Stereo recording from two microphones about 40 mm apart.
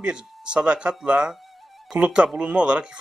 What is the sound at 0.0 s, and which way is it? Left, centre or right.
Speech, right.